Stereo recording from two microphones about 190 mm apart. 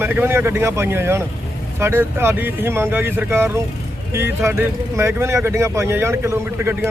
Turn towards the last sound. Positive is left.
turn(degrees=-10)  # may be behind; listen again after turning